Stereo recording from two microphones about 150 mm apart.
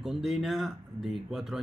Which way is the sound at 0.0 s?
Centre (ahead or behind).